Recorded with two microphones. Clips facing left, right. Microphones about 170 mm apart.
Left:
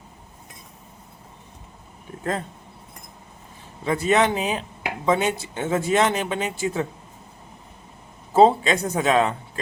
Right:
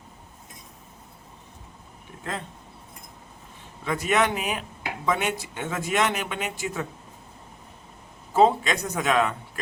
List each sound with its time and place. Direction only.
3.8 s speech: 30° left (ahead or behind)
8.3 s speech: 30° left (ahead or behind)